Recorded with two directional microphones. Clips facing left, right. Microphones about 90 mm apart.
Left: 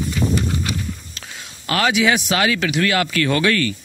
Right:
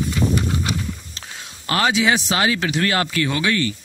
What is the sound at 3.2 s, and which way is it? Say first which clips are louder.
Speech: left 3 dB; 15° right (ahead or behind).